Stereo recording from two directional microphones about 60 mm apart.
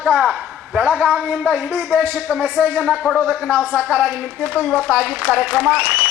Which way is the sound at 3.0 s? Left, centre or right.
Centre.